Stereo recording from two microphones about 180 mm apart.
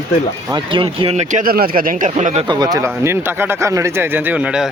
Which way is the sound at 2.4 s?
20° right (ahead or behind).